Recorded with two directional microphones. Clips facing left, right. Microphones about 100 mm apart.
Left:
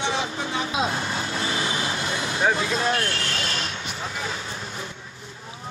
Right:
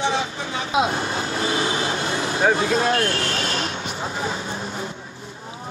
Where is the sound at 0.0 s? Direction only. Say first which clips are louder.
Right 3 dB; 30° right (ahead or behind).